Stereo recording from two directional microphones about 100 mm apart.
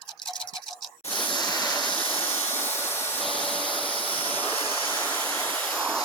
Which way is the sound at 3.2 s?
10° left (ahead or behind).